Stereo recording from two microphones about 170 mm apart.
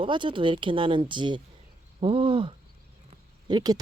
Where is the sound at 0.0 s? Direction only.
30° right (ahead or behind).